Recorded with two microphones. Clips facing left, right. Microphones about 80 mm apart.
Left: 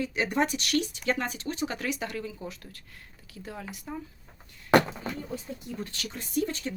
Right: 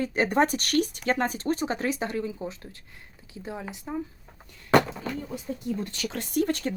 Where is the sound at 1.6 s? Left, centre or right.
Right.